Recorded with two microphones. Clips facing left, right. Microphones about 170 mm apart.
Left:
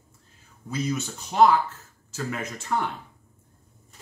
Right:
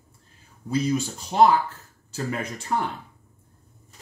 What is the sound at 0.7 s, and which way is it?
Speech, 35° right (ahead or behind).